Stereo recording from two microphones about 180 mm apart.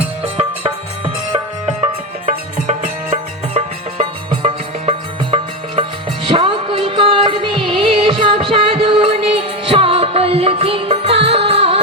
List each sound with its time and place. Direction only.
0.2 s music: 35° right (ahead or behind)